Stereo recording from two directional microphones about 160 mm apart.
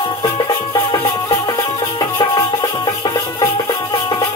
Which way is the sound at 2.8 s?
25° left (ahead or behind).